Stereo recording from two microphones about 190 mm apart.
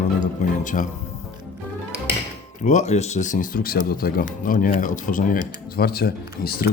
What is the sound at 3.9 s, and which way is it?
Speech, 50° left (ahead or behind).